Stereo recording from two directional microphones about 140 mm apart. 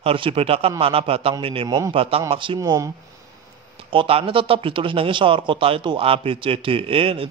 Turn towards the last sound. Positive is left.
turn(degrees=-40)  # may be behind; listen again after turning